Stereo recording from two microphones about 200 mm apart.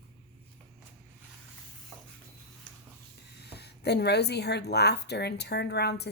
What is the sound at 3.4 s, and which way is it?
Speech, 55° left (ahead or behind).